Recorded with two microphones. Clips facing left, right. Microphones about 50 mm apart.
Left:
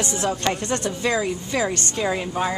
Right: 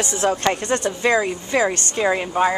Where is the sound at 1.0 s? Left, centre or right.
Right.